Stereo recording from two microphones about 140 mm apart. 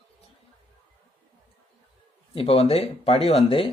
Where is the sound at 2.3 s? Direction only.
45° left (ahead or behind).